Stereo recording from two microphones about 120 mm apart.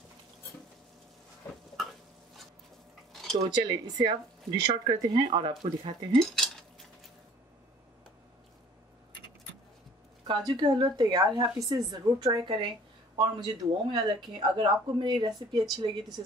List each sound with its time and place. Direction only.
3.1 s cutlery: centre (ahead or behind)
3.4 s speech: 40° right (ahead or behind)
6.3 s cutlery: centre (ahead or behind)
10.2 s speech: 40° right (ahead or behind)
12.4 s speech: 45° right (ahead or behind)